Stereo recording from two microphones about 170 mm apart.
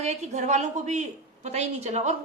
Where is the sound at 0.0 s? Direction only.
40° right (ahead or behind).